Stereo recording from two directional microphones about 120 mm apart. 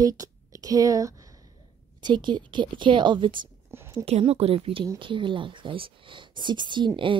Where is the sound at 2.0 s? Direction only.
40° right (ahead or behind).